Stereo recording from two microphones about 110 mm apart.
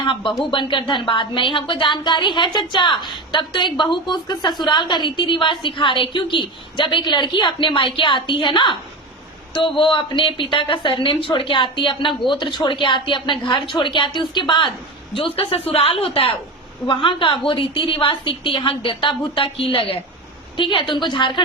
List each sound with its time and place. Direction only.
0.0 s a woman's voice: 45° left (ahead or behind)